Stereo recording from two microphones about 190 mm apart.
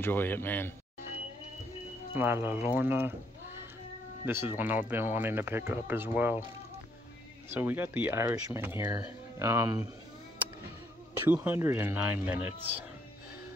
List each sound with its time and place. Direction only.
0.0 s speech: 10° left (ahead or behind)
2.1 s speech: 10° right (ahead or behind)
7.4 s speech: 10° right (ahead or behind)
11.1 s speech: 10° right (ahead or behind)